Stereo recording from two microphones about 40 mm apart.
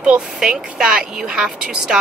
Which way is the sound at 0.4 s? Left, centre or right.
Centre.